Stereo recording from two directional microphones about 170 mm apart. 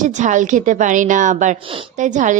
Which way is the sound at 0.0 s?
45° right (ahead or behind).